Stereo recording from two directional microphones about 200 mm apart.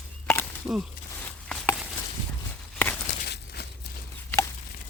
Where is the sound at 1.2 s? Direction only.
10° left (ahead or behind).